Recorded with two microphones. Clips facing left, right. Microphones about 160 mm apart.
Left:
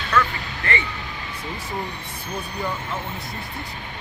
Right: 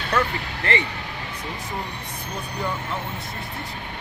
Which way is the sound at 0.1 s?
35° right (ahead or behind).